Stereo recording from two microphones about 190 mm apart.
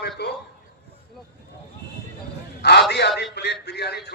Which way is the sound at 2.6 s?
60° left (ahead or behind).